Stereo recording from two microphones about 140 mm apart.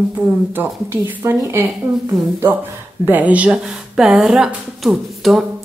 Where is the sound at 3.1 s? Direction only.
10° right (ahead or behind).